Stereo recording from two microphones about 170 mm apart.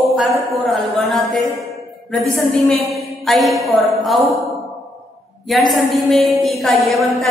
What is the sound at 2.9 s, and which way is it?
Speech, centre (ahead or behind).